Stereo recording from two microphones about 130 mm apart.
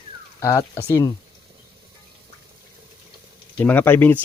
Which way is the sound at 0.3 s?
25° left (ahead or behind).